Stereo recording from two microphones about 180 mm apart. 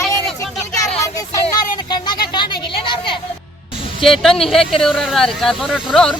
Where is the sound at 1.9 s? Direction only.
25° left (ahead or behind).